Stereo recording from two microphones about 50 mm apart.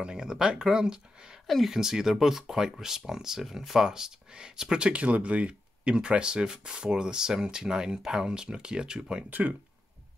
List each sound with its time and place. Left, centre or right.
0.0 s speech: centre
9.3 s speech: right